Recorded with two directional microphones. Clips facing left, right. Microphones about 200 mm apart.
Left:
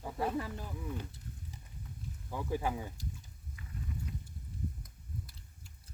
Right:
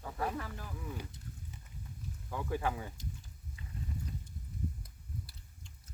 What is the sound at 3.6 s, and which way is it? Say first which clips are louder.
Clip-clop: right 1 dB; 25° right (ahead or behind).